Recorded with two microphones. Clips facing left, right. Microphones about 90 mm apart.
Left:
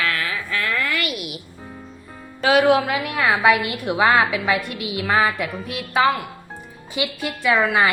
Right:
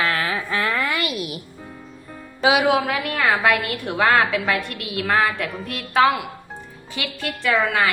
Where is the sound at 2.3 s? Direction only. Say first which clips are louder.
Left 2 dB; 5° right (ahead or behind).